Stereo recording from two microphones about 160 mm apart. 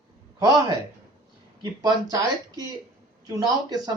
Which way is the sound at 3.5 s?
25° right (ahead or behind).